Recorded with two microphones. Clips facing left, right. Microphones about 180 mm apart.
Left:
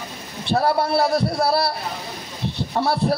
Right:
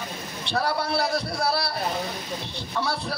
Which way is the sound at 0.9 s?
60° left (ahead or behind).